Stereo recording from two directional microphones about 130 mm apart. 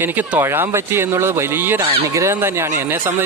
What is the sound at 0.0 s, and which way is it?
Speech, 15° right (ahead or behind).